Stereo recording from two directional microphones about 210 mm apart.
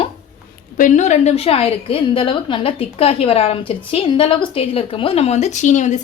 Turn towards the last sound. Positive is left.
turn(degrees=35)  # may be behind; listen again after turning